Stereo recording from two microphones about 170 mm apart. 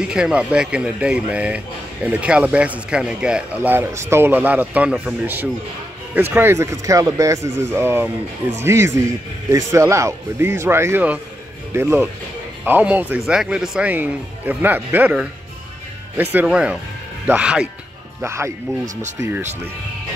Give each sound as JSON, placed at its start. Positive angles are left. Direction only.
{"t": 0.0, "sound": "a man's voice", "side_deg": -5}